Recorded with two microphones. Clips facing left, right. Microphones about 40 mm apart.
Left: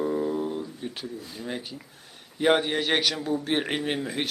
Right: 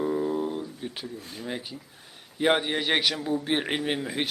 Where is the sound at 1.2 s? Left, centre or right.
Right.